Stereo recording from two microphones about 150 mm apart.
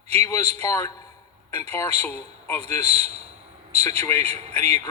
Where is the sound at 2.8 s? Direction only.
45° right (ahead or behind).